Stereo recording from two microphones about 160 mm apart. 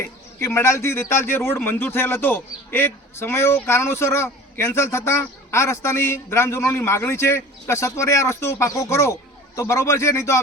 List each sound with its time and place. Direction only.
0.0 s a man's voice: 15° left (ahead or behind)